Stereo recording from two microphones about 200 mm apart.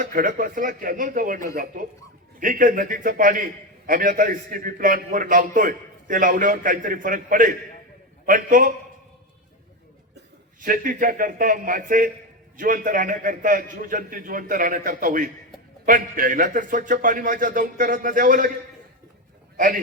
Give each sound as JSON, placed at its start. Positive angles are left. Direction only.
{"t": 0.0, "sound": "a man's voice", "side_deg": -45}
{"t": 10.6, "sound": "a man's voice", "side_deg": -45}
{"t": 19.5, "sound": "a man's voice", "side_deg": -45}